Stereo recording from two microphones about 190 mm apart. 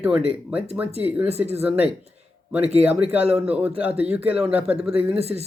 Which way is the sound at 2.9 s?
10° right (ahead or behind).